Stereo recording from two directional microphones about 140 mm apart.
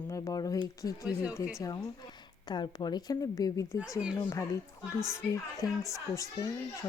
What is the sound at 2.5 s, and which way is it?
Speech, 30° left (ahead or behind).